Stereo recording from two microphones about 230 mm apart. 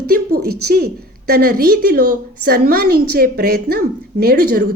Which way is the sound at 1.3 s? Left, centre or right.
Right.